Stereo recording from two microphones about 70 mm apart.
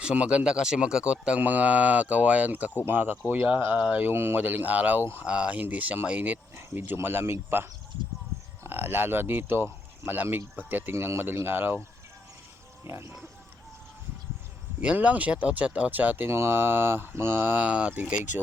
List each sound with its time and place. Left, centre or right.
0.0 s speech: centre
6.6 s speech: right
8.3 s a sound: right
8.6 s speech: right
10.9 s speech: right
14.8 s speech: centre
17.7 s speech: centre